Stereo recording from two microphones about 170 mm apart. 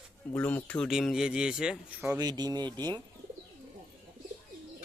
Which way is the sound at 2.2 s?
25° right (ahead or behind).